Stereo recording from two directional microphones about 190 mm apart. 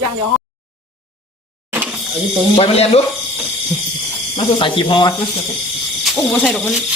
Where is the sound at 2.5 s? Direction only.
30° left (ahead or behind).